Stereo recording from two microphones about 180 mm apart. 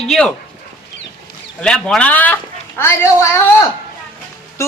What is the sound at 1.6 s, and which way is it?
A woman's voice, 5° left (ahead or behind).